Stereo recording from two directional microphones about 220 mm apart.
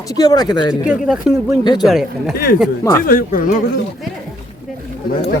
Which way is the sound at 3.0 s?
40° left (ahead or behind).